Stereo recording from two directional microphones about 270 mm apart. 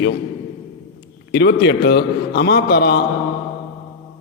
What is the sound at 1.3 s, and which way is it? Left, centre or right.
A man's voice, left.